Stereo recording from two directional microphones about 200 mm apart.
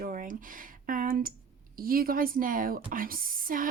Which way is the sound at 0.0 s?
45° right (ahead or behind).